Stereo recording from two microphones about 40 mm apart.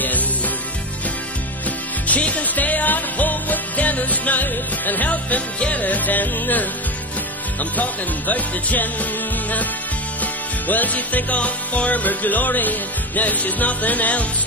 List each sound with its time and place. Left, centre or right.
2.0 s music: left
5.1 s music: left
7.7 s music: left
10.7 s music: left